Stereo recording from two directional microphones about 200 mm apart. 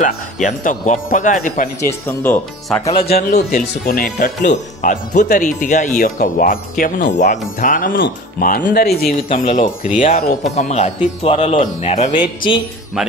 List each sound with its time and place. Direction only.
0.0 s speech: 40° left (ahead or behind)
1.8 s speech: 10° left (ahead or behind)
3.0 s speech: 50° left (ahead or behind)
4.8 s speech: 40° left (ahead or behind); by 12.6 s 25° left (ahead or behind)